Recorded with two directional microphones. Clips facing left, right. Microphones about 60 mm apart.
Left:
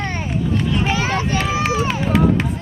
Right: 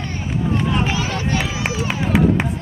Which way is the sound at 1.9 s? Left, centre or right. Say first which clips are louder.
Right 3 dB; centre.